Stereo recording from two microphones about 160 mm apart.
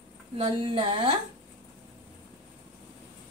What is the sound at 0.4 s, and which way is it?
Speech, 35° right (ahead or behind).